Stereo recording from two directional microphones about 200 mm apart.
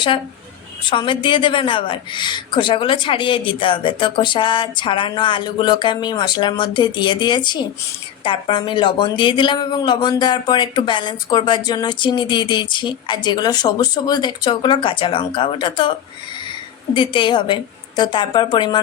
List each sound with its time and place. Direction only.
0.9 s speech: 25° left (ahead or behind)
16.9 s speech: 25° left (ahead or behind)